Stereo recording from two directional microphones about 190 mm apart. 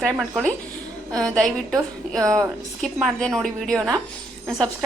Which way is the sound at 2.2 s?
15° right (ahead or behind).